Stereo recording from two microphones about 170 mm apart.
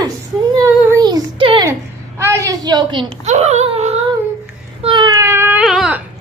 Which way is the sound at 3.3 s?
40° right (ahead or behind).